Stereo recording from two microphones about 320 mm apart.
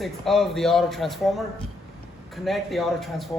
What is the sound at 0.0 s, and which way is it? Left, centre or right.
Speech, centre.